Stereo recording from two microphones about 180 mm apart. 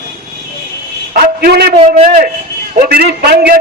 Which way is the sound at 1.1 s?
55° right (ahead or behind).